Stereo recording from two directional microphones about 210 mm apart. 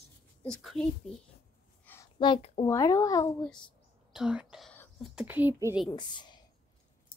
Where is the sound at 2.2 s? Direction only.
25° left (ahead or behind).